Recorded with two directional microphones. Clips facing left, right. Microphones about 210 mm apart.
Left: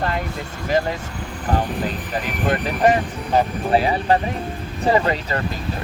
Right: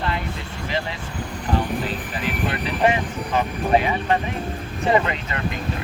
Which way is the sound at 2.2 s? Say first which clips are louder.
Left 3 dB; 45° left (ahead or behind).